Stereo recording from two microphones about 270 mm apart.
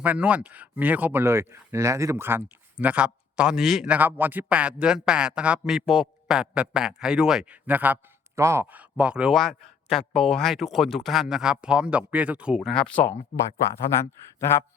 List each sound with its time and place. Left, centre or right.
0.0 s a man's voice: centre
13.1 s speech: left
13.9 s speech: centre